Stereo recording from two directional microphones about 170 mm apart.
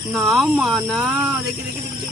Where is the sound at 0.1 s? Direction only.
Centre (ahead or behind).